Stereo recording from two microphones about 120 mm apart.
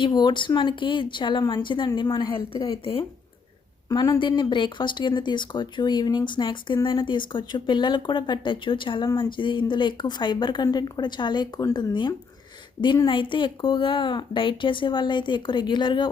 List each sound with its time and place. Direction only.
0.0 s speech: 40° left (ahead or behind)
2.6 s speech: 50° left (ahead or behind)
3.8 s speech: 30° left (ahead or behind)